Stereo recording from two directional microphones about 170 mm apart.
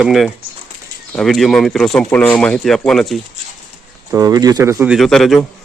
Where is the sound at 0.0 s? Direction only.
Centre (ahead or behind).